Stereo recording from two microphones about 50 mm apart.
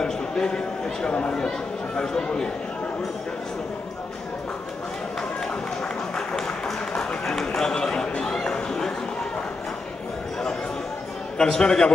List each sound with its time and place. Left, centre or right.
0.0 s a man's voice: centre
6.1 s a sound: centre
11.3 s a man's voice: centre